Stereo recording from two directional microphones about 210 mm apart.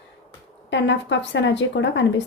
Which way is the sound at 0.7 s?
60° left (ahead or behind).